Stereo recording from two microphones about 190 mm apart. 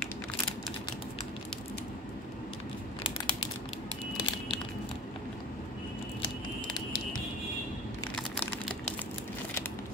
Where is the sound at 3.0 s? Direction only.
20° left (ahead or behind).